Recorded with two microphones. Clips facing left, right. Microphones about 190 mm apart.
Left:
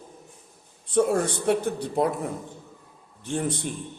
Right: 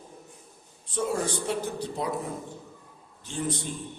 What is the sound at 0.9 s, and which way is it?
A man's voice, 60° left (ahead or behind).